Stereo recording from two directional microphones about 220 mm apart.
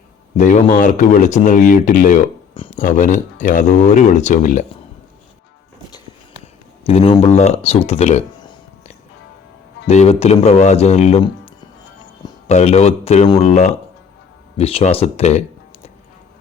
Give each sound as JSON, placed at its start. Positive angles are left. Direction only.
{"t": 0.3, "sound": "speech", "side_deg": 35}
{"t": 6.8, "sound": "speech", "side_deg": 25}
{"t": 9.8, "sound": "speech", "side_deg": 30}
{"t": 12.5, "sound": "speech", "side_deg": 30}